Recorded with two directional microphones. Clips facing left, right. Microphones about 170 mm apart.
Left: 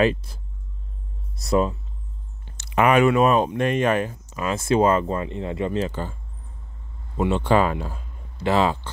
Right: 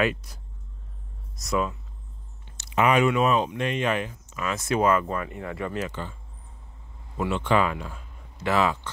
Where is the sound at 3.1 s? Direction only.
45° left (ahead or behind); by 5.9 s 25° left (ahead or behind).